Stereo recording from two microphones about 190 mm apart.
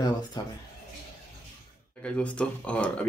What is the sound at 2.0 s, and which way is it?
Speech, 5° left (ahead or behind).